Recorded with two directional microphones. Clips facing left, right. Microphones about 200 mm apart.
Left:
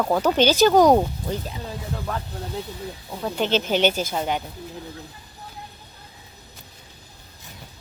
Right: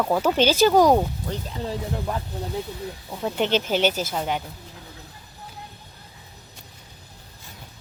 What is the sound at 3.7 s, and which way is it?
Speech, 5° right (ahead or behind).